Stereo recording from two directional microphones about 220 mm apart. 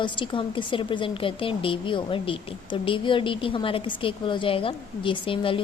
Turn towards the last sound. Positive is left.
turn(degrees=25)  # may be behind; listen again after turning